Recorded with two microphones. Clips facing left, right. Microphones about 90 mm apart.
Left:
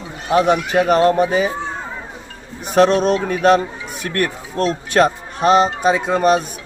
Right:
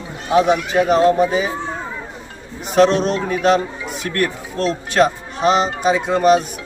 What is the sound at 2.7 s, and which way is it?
Speech, 50° left (ahead or behind).